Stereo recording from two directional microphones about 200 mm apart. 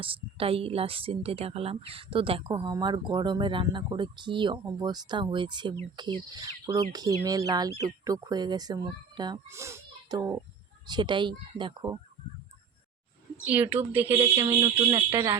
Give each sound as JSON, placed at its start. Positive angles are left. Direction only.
{"t": 0.0, "sound": "a woman's voice", "side_deg": -25}
{"t": 13.4, "sound": "speech", "side_deg": -10}
{"t": 14.4, "sound": "a woman's voice", "side_deg": -25}